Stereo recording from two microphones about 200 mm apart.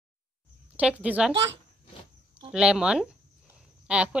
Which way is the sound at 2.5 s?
5° right (ahead or behind).